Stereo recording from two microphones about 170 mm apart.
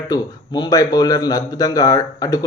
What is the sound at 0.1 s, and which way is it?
Speech, 25° left (ahead or behind).